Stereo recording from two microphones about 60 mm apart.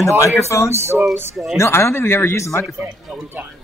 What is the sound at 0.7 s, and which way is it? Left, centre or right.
Speech, right.